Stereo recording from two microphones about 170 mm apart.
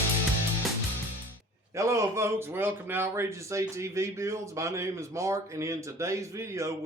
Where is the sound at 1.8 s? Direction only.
15° right (ahead or behind).